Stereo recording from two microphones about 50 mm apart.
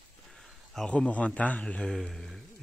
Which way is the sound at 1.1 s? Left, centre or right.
Left.